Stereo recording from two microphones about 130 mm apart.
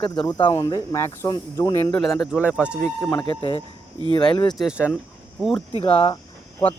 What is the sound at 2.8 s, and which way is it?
Speech, 20° left (ahead or behind).